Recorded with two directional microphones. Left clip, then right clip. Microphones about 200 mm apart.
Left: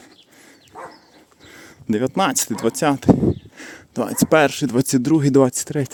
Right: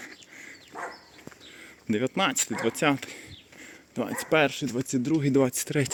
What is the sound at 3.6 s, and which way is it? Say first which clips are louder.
Speech: left 8 dB; 45° left (ahead or behind).